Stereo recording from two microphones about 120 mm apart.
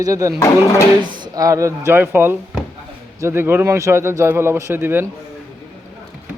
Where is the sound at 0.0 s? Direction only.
25° right (ahead or behind).